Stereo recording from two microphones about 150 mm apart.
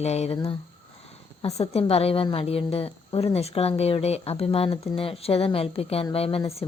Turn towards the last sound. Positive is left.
turn(degrees=40)  # may be behind; listen again after turning